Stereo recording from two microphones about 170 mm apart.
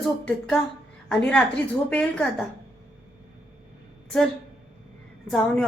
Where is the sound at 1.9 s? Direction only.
10° left (ahead or behind).